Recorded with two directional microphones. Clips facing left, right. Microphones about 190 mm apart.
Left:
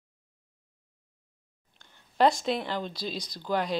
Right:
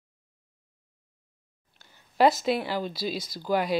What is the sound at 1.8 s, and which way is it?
Speech, 5° right (ahead or behind).